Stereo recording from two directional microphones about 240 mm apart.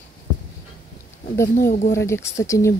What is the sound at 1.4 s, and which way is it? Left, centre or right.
Speech, left.